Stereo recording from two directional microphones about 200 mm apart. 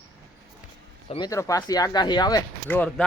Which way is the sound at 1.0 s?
30° left (ahead or behind).